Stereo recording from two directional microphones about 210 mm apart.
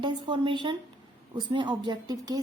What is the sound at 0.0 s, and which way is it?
A woman's voice, 20° right (ahead or behind).